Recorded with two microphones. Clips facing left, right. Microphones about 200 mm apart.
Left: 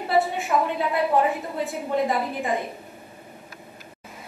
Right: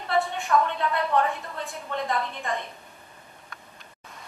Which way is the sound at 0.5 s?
15° left (ahead or behind).